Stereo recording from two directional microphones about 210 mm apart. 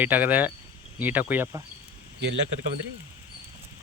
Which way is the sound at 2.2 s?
55° right (ahead or behind).